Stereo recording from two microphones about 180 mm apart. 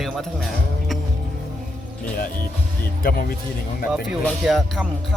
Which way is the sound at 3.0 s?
50° left (ahead or behind).